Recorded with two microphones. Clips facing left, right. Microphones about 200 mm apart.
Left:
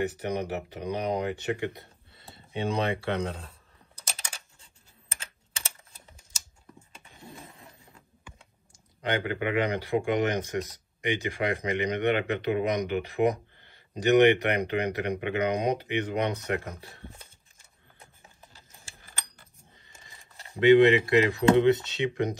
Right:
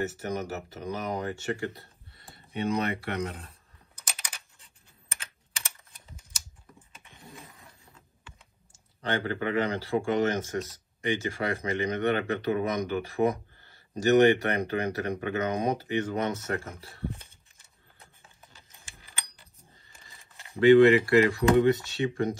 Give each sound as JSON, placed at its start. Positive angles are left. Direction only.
{"t": 0.0, "sound": "speech", "side_deg": 15}
{"t": 5.1, "sound": "typing", "side_deg": 30}
{"t": 6.9, "sound": "dog", "side_deg": 30}
{"t": 9.0, "sound": "speech", "side_deg": 15}
{"t": 20.5, "sound": "speech", "side_deg": 20}